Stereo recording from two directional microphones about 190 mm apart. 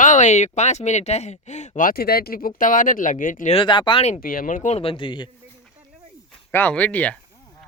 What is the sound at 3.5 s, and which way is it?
Speech, 25° left (ahead or behind).